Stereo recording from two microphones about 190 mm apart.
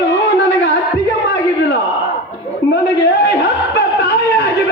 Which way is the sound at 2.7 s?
60° left (ahead or behind).